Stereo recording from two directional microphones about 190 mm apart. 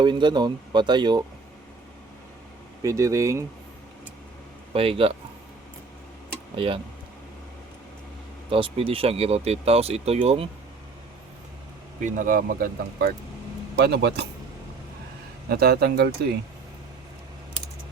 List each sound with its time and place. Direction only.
0.0 s speech: 25° right (ahead or behind)
2.8 s speech: 15° right (ahead or behind)
4.7 s speech: 30° right (ahead or behind)
6.6 s speech: 30° right (ahead or behind)
8.4 s speech: 30° right (ahead or behind)
12.0 s speech: 45° right (ahead or behind)
13.7 s speech: 60° right (ahead or behind)
15.4 s speech: 55° right (ahead or behind)